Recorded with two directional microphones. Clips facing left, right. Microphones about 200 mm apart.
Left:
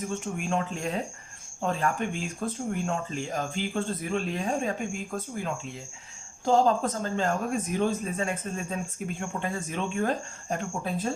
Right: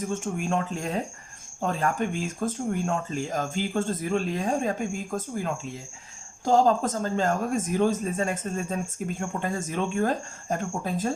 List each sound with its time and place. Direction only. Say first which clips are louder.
0.1 s speech: right 2 dB; 45° right (ahead or behind)
6.4 s speech: right 2 dB; 40° right (ahead or behind)